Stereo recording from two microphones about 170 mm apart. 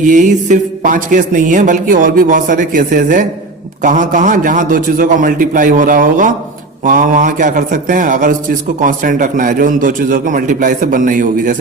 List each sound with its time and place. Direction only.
0.0 s a man's voice: 50° right (ahead or behind)